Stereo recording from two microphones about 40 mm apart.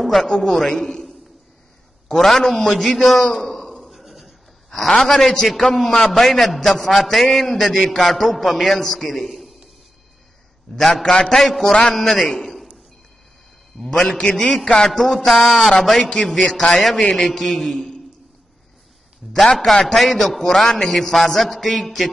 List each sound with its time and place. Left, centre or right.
0.0 s a man's voice: centre
2.1 s a man's voice: centre
3.0 s a sound: centre
3.9 s a sound: centre
4.6 s a man's voice: centre
11.0 s a man's voice: centre
11.3 s a man's voice: centre
14.5 s a man's voice: centre
19.4 s a man's voice: centre